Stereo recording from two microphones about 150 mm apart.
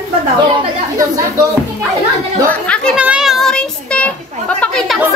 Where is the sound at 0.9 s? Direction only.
20° right (ahead or behind).